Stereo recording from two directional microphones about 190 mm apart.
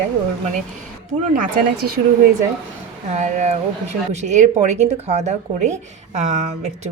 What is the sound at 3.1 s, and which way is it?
Speech, 40° right (ahead or behind).